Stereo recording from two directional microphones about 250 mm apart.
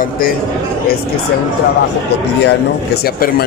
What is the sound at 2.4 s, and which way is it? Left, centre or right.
Speech, left.